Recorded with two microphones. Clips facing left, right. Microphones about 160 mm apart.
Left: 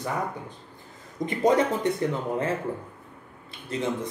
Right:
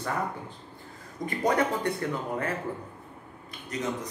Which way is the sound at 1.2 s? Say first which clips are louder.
Left 4 dB; 20° left (ahead or behind).